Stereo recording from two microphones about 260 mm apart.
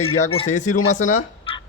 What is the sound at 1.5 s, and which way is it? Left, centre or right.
Fowl, left.